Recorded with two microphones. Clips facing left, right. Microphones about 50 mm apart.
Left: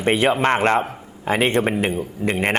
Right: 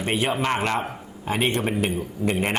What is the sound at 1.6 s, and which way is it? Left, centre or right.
Speech, left.